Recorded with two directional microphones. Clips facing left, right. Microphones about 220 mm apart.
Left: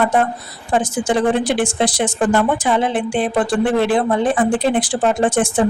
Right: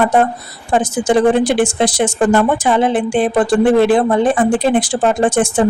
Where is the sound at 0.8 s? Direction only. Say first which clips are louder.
Right 6 dB; 45° right (ahead or behind).